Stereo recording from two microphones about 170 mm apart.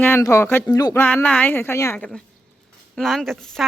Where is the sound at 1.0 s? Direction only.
10° left (ahead or behind).